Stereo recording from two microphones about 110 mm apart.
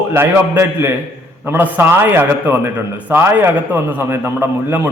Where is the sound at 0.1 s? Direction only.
25° right (ahead or behind).